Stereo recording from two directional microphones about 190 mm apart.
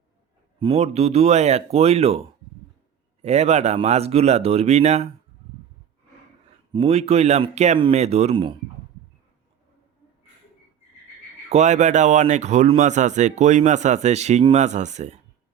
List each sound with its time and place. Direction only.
0.6 s speech: 30° right (ahead or behind)
6.7 s speech: 30° right (ahead or behind)
11.4 s speech: 35° right (ahead or behind)